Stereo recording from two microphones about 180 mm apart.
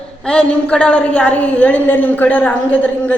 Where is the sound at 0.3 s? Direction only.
5° left (ahead or behind).